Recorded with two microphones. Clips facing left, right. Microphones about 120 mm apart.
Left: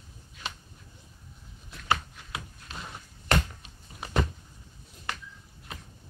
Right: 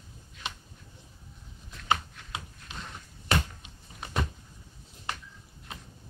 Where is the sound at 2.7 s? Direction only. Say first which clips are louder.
Left 1 dB; 5° left (ahead or behind).